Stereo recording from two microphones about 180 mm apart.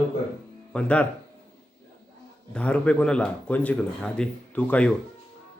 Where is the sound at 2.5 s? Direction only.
5° left (ahead or behind).